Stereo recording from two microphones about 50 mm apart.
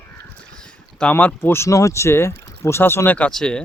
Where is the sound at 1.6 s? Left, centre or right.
Left.